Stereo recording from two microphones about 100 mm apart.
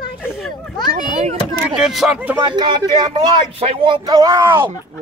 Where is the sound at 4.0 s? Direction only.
35° right (ahead or behind).